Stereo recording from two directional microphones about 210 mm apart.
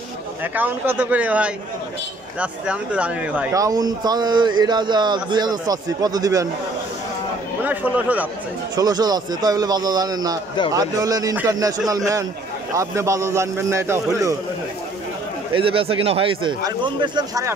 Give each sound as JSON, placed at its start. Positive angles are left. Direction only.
{"t": 0.4, "sound": "speech", "side_deg": -10}
{"t": 7.6, "sound": "speech", "side_deg": -5}
{"t": 8.7, "sound": "speech", "side_deg": -20}
{"t": 15.5, "sound": "speech", "side_deg": -25}